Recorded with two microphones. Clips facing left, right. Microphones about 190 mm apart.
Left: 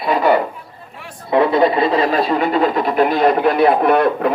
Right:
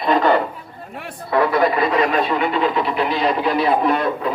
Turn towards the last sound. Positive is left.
turn(degrees=60)  # may be behind; listen again after turning